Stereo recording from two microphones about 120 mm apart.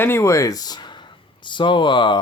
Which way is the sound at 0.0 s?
20° left (ahead or behind).